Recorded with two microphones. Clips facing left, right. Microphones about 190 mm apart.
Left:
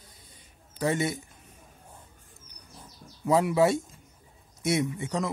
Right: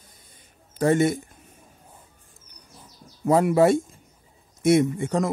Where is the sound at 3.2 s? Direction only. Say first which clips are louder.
Right 5 dB; 50° right (ahead or behind).